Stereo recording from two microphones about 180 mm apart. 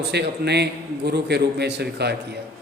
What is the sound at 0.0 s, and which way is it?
A man's voice, 70° right (ahead or behind).